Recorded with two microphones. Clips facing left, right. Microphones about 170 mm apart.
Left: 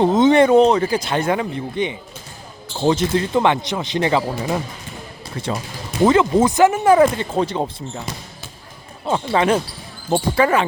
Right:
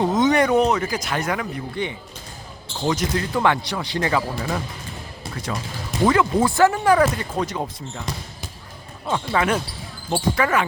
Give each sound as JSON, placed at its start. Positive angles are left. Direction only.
{"t": 0.0, "sound": "speech", "side_deg": 25}
{"t": 6.1, "sound": "speech", "side_deg": 20}
{"t": 9.0, "sound": "speech", "side_deg": 30}